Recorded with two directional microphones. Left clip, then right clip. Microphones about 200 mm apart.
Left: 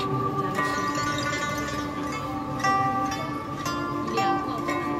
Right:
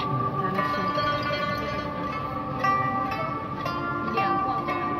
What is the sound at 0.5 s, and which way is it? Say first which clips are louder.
Music: right 2 dB; 45° right (ahead or behind).